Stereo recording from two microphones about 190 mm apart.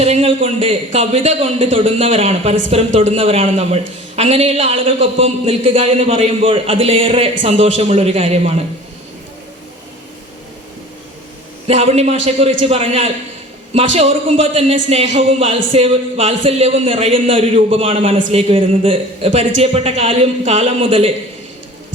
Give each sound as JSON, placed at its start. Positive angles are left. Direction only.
{"t": 0.0, "sound": "a man's voice", "side_deg": -30}
{"t": 11.7, "sound": "a man's voice", "side_deg": -35}